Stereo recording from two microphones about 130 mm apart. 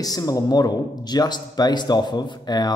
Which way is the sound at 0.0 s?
30° left (ahead or behind).